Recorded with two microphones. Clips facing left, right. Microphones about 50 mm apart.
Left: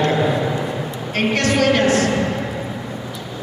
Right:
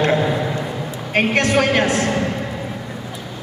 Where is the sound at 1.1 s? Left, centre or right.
Centre.